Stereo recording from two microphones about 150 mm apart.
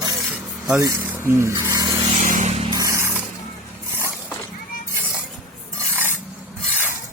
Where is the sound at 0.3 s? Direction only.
15° right (ahead or behind).